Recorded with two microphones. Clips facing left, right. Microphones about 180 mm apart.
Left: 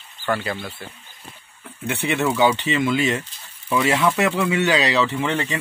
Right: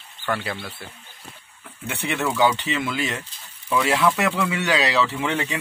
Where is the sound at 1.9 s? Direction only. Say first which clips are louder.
Left 4 dB; centre (ahead or behind).